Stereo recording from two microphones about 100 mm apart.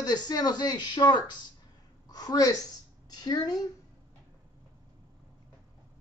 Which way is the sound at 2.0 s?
40° left (ahead or behind).